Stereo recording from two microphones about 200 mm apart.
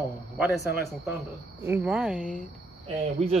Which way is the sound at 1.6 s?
10° right (ahead or behind).